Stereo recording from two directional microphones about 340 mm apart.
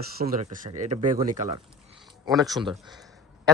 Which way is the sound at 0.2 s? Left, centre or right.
Right.